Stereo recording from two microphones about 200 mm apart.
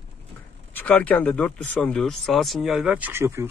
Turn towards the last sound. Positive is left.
turn(degrees=-10)  # may be behind; listen again after turning